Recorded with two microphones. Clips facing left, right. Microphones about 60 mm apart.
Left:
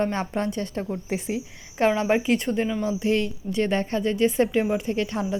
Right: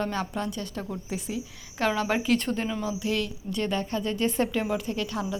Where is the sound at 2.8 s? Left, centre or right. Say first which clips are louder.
Left 5 dB; left.